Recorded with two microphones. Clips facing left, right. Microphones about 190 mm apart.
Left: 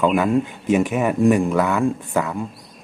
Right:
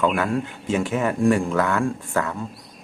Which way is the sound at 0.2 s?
15° left (ahead or behind).